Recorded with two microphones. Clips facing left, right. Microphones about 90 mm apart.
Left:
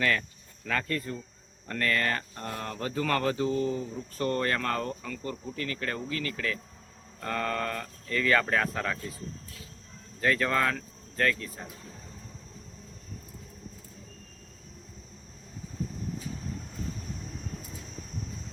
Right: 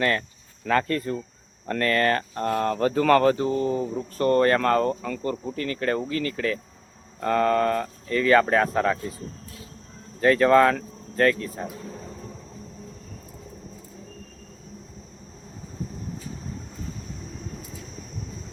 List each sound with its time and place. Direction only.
0.0 s speech: 40° right (ahead or behind)
3.3 s speech: 40° right (ahead or behind)
10.2 s speech: 35° right (ahead or behind)